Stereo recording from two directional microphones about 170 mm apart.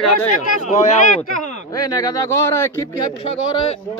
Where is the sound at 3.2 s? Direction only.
35° left (ahead or behind).